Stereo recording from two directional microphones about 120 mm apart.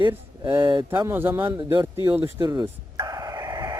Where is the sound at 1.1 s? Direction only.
15° right (ahead or behind).